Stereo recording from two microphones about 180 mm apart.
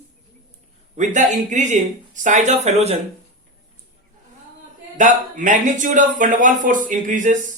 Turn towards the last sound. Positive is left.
turn(degrees=-45)  # may be behind; listen again after turning